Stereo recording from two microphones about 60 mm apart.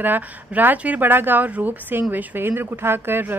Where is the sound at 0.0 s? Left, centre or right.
Right.